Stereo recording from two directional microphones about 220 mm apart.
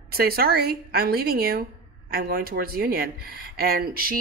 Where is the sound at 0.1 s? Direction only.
45° right (ahead or behind).